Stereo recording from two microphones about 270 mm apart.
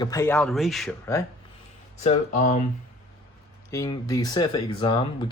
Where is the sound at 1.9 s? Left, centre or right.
Left.